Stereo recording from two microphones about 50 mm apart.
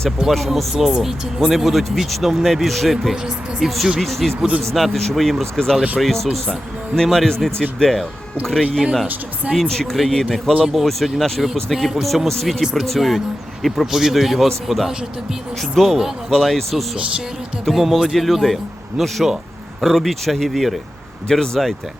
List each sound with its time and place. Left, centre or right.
0.3 s speech: centre
4.4 s speech: right
4.7 s speech: centre